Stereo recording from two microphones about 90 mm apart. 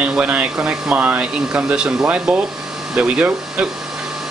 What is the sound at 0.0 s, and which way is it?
Speech, 15° right (ahead or behind).